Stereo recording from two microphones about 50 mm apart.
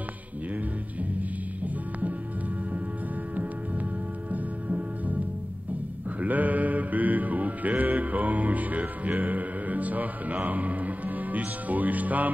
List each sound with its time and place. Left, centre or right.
1.1 s music: right
4.3 s music: right
6.2 s music: right